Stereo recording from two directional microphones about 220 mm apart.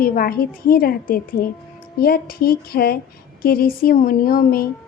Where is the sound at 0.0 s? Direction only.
40° left (ahead or behind).